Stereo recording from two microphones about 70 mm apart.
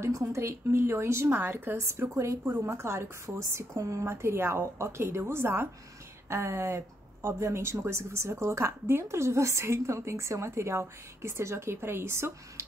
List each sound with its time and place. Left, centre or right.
0.0 s speech: right
4.1 s speech: right